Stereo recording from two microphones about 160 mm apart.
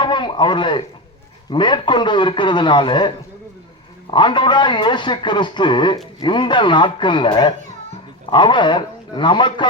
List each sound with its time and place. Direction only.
0.0 s a man's voice: 30° left (ahead or behind)
4.1 s a man's voice: 30° left (ahead or behind)